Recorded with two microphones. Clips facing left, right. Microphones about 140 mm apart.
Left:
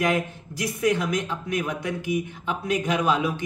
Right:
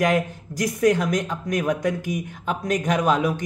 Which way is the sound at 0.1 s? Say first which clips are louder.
Right 3 dB; 45° right (ahead or behind).